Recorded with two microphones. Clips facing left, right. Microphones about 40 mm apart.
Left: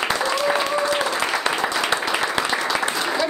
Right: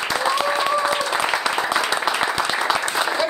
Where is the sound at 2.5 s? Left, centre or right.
Centre.